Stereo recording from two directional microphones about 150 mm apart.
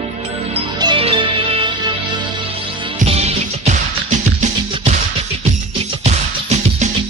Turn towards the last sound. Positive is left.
turn(degrees=-50)  # may be behind; listen again after turning